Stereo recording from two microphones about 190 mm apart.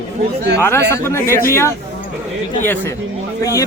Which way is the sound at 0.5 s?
15° left (ahead or behind).